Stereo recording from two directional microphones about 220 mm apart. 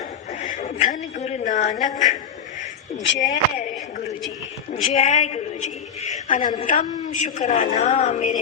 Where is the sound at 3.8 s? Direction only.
35° left (ahead or behind).